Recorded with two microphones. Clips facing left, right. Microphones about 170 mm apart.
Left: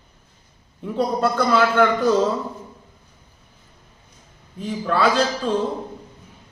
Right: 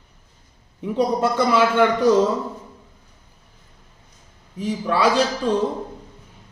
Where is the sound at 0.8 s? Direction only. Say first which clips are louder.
Right 1 dB; 15° right (ahead or behind).